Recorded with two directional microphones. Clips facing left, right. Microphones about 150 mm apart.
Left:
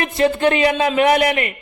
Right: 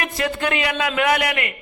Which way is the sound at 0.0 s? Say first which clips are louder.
Left 7 dB; 25° left (ahead or behind).